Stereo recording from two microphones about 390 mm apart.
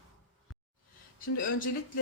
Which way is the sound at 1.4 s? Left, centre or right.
Left.